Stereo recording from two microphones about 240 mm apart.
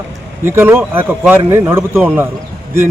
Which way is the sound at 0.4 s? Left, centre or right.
Centre.